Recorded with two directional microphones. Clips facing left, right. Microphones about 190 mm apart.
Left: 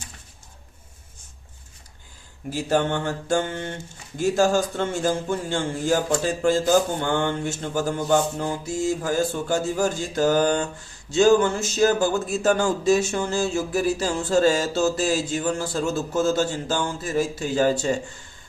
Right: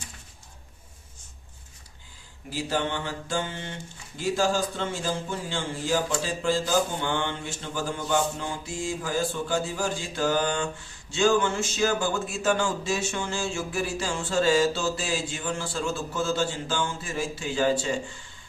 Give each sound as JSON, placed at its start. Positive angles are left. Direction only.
{"t": 2.5, "sound": "a man's voice", "side_deg": 45}